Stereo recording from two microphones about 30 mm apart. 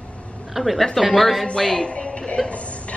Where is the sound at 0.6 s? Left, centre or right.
Centre.